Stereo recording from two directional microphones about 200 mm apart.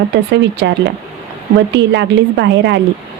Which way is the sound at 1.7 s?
60° right (ahead or behind).